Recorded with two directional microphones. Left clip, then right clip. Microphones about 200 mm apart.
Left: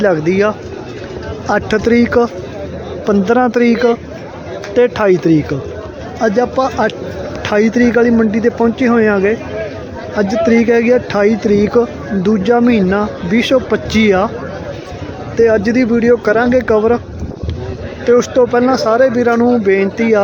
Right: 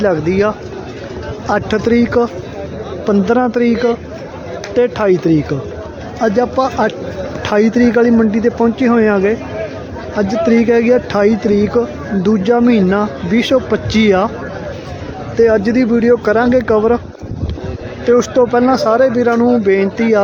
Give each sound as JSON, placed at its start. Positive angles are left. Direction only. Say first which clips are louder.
{"t": 0.0, "sound": "speech", "louder": "left 1 dB", "side_deg": 0}
{"t": 15.4, "sound": "speech", "louder": "even", "side_deg": -5}
{"t": 18.0, "sound": "speech", "louder": "left 1 dB", "side_deg": -5}